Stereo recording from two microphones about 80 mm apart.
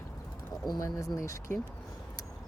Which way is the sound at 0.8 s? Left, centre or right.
Left.